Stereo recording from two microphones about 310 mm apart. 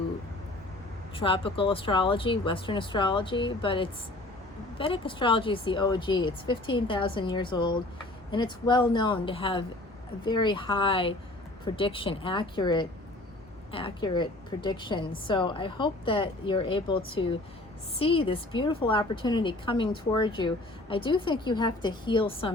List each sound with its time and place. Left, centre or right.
1.1 s a woman's voice: centre